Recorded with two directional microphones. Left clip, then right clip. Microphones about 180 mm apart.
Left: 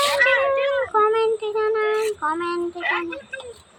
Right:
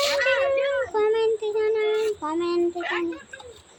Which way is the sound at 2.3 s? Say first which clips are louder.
Left 1 dB; 15° right (ahead or behind).